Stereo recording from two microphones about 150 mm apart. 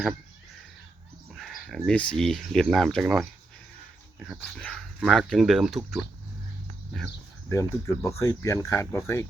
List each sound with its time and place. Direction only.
1.3 s speech: centre (ahead or behind)
7.5 s speech: 20° left (ahead or behind)